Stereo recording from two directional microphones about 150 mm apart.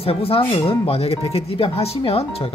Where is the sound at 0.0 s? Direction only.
40° left (ahead or behind).